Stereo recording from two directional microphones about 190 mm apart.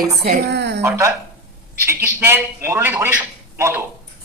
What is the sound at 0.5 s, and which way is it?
Speech, 60° right (ahead or behind).